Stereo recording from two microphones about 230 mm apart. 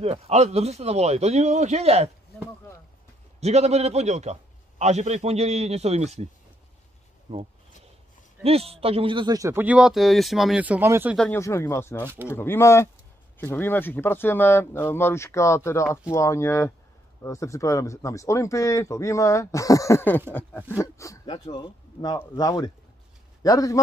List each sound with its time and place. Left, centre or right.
0.0 s a man's voice: right
3.3 s a man's voice: right
7.3 s a man's voice: right
8.5 s a man's voice: right; by 11.1 s centre
11.1 s speech: centre